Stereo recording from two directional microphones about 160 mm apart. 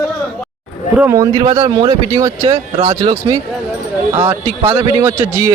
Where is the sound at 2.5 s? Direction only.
45° right (ahead or behind).